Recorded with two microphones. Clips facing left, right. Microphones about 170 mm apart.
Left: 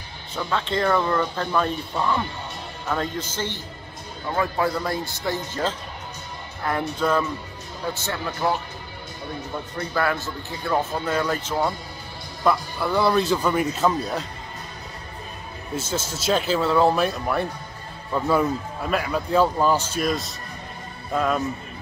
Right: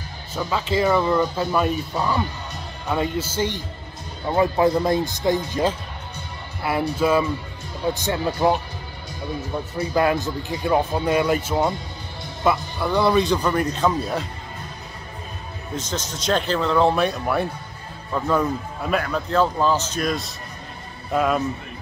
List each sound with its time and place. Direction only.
0.3 s a man's voice: 5° right (ahead or behind)
9.8 s speech: 15° right (ahead or behind)
12.4 s a man's voice: centre (ahead or behind)
15.7 s a man's voice: 5° left (ahead or behind)